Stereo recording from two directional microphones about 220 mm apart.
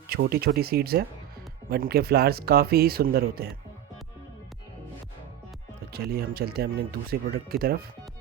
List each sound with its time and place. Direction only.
0.1 s speech: 45° right (ahead or behind)
5.9 s speech: 45° right (ahead or behind)